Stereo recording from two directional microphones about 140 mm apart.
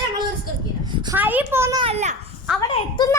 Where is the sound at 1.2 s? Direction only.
10° right (ahead or behind).